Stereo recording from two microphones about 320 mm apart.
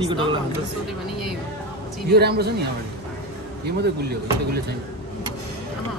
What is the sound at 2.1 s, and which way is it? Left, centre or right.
Speech, right.